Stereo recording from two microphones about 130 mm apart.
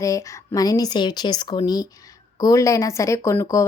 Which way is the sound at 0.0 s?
25° left (ahead or behind).